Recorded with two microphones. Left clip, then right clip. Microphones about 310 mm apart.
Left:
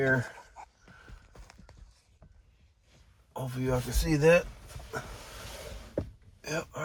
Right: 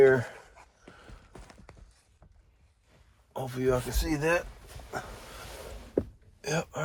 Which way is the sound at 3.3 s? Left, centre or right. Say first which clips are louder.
Right 4 dB; right.